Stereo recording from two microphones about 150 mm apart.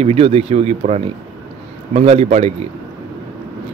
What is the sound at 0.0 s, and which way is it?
A man's voice, 45° right (ahead or behind).